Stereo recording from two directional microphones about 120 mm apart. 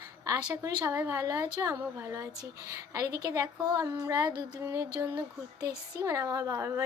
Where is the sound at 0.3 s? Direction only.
25° right (ahead or behind).